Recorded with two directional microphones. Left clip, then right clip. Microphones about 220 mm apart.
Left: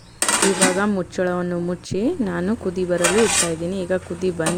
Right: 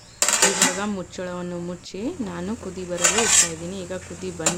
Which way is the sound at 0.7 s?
25° left (ahead or behind).